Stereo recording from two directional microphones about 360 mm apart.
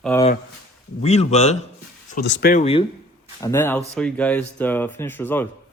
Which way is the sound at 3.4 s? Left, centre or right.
Centre.